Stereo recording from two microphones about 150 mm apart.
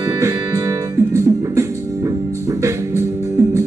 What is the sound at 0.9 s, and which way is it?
Music, 20° right (ahead or behind).